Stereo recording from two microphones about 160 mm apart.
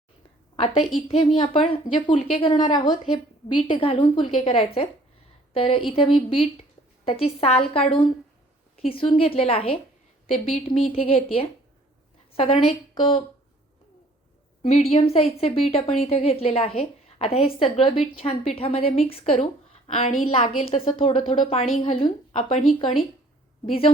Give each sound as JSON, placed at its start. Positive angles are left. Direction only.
{"t": 0.5, "sound": "a woman's voice", "side_deg": 35}
{"t": 14.6, "sound": "a woman's voice", "side_deg": 40}
{"t": 20.7, "sound": "a woman's voice", "side_deg": 35}